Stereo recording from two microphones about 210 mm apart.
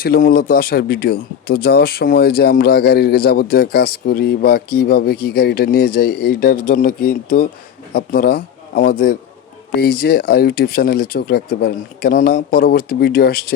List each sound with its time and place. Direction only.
0.0 s a man's voice: 45° left (ahead or behind)